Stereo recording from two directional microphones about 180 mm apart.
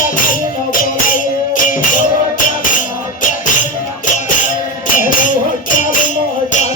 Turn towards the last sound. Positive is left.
turn(degrees=45)  # may be behind; listen again after turning